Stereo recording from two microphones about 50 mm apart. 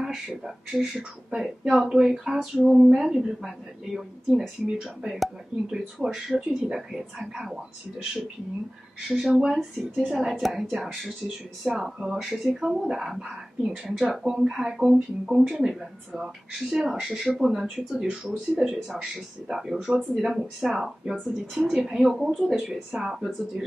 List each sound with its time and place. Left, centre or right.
0.7 s speech: centre
9.5 s speech: centre
14.2 s speech: centre
16.5 s speech: centre